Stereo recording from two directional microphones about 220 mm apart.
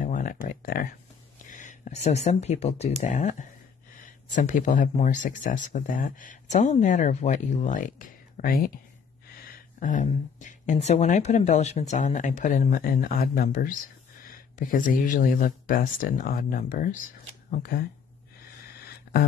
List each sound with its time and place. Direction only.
0.0 s a sound: 40° left (ahead or behind)
1.4 s speech: 35° left (ahead or behind)
9.8 s speech: 35° left (ahead or behind)